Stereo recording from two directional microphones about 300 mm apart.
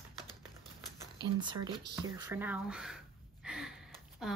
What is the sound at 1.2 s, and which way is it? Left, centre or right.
Speech, centre.